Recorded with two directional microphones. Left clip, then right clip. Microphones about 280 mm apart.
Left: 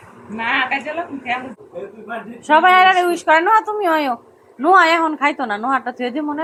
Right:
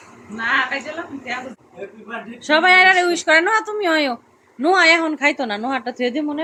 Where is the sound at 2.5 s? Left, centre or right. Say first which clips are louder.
Left 1 dB; centre.